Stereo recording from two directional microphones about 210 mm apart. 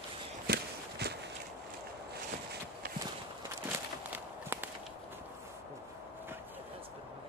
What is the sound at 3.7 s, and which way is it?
Walk, 10° right (ahead or behind).